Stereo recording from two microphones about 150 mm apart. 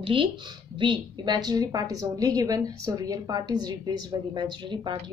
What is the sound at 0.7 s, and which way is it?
A woman's voice, 30° right (ahead or behind).